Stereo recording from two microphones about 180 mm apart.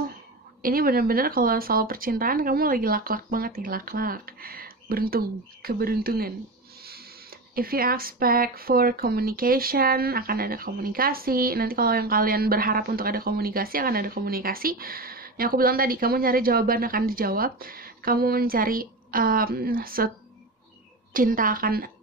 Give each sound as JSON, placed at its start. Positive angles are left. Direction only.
{"t": 0.6, "sound": "speech", "side_deg": -55}
{"t": 7.5, "sound": "speech", "side_deg": -55}
{"t": 21.1, "sound": "speech", "side_deg": -50}